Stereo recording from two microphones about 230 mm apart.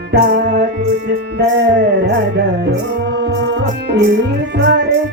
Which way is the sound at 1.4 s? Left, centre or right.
Right.